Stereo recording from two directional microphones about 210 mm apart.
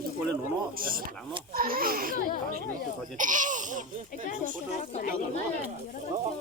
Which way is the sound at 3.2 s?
40° right (ahead or behind).